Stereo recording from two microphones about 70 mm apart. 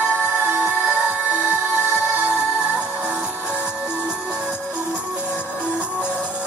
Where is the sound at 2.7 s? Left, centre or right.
Centre.